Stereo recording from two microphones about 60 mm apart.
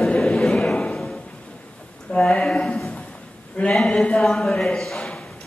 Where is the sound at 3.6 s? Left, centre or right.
Left.